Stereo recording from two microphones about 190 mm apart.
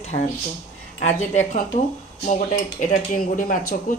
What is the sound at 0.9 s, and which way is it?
Speech, 40° left (ahead or behind).